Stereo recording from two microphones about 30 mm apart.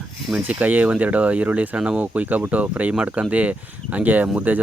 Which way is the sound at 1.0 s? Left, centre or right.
Right.